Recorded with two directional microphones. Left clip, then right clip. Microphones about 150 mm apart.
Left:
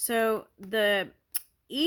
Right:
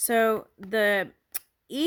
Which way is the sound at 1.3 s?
30° right (ahead or behind).